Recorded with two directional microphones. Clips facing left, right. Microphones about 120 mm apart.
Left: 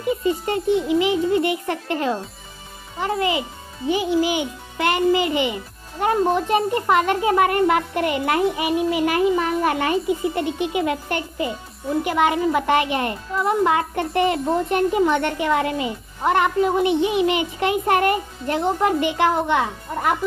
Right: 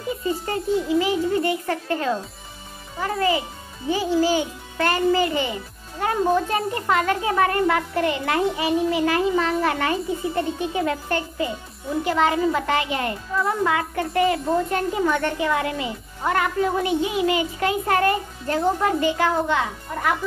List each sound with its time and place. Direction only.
0.5 s a child's voice: 20° left (ahead or behind)